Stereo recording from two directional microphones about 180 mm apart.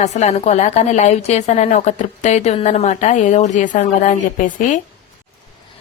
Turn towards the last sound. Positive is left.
turn(degrees=45)  # may be behind; listen again after turning